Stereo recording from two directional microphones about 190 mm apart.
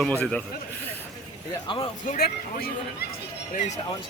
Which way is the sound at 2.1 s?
55° left (ahead or behind).